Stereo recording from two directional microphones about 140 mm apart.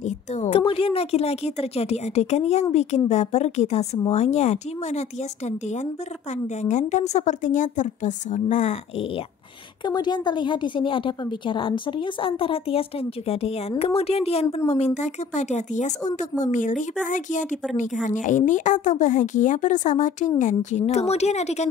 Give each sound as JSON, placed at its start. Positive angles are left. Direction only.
{"t": 0.0, "sound": "a woman's voice", "side_deg": 55}
{"t": 6.3, "sound": "a woman's voice", "side_deg": 60}
{"t": 9.8, "sound": "a woman's voice", "side_deg": 30}